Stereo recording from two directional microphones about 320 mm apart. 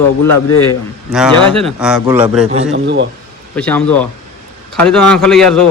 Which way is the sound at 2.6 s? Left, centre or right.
Right.